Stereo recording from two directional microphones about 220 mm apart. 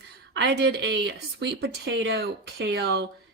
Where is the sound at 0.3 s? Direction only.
50° right (ahead or behind).